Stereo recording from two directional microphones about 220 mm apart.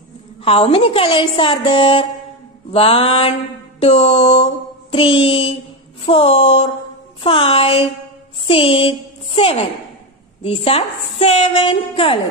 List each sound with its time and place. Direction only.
0.4 s a woman's voice: 25° left (ahead or behind)